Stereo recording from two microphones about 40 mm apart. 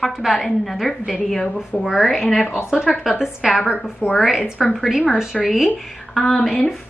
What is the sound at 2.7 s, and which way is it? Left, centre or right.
A woman's voice, centre.